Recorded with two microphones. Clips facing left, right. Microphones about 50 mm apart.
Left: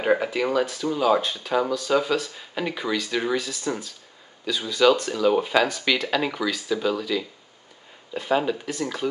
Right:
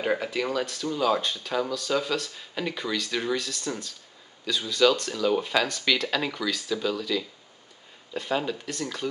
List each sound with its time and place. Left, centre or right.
0.0 s speech: centre